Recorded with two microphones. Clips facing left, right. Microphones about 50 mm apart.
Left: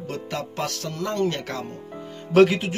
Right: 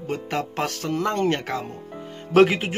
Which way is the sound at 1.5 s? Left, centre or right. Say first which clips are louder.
Right 2 dB; centre.